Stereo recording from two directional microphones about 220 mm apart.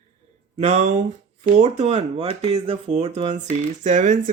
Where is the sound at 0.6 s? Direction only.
30° right (ahead or behind).